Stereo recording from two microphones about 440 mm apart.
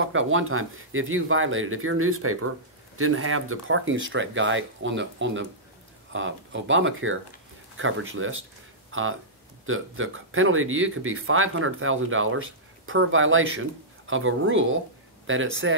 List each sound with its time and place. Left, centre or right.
0.0 s speech: right
9.7 s speech: right